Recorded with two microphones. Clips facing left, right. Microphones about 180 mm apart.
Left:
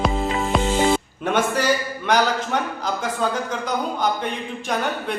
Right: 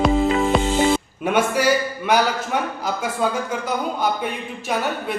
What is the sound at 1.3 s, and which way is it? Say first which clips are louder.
A man's voice: right 2 dB; 10° right (ahead or behind).